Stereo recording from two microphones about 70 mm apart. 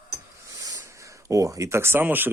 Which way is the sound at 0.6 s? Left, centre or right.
Right.